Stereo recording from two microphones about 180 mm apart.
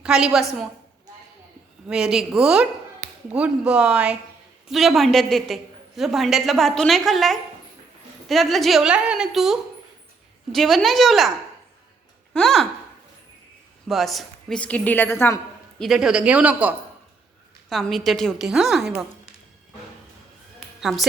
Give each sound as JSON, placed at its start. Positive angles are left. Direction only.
{"t": 0.0, "sound": "a woman's voice", "side_deg": -5}
{"t": 1.9, "sound": "a woman's voice", "side_deg": -5}
{"t": 3.0, "sound": "a sound", "side_deg": -40}
{"t": 3.3, "sound": "a woman's voice", "side_deg": -5}
{"t": 12.3, "sound": "a woman's voice", "side_deg": 0}
{"t": 13.8, "sound": "a woman's voice", "side_deg": 0}
{"t": 15.8, "sound": "a woman's voice", "side_deg": 0}